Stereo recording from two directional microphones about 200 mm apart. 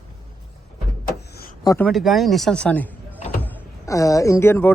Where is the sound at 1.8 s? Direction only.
Centre (ahead or behind).